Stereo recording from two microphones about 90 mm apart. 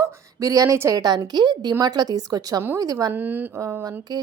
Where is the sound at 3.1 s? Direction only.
20° right (ahead or behind).